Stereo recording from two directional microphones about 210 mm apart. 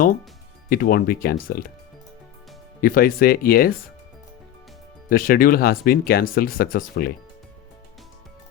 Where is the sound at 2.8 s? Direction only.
45° left (ahead or behind).